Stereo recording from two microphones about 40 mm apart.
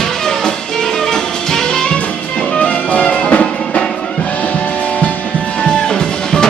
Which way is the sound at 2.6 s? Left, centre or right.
Left.